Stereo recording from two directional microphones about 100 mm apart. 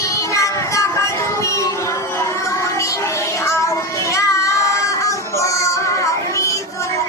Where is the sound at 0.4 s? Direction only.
30° left (ahead or behind).